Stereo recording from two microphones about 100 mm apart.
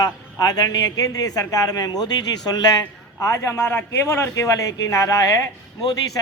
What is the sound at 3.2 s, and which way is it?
A man's voice, 30° left (ahead or behind).